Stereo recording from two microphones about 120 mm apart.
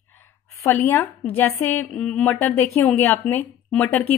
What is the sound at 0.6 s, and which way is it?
A woman's voice, 20° left (ahead or behind).